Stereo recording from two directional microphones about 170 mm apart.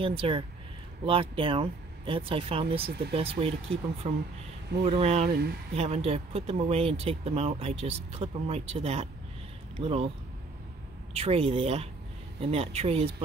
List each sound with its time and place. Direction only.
0.0 s speech: 30° right (ahead or behind)
5.3 s speech: 70° right (ahead or behind)
5.8 s speech: 40° right (ahead or behind)
11.1 s speech: 35° right (ahead or behind)